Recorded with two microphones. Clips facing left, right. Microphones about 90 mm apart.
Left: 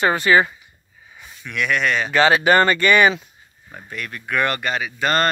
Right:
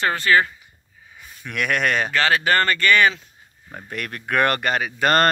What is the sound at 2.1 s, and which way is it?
Speech, 20° left (ahead or behind).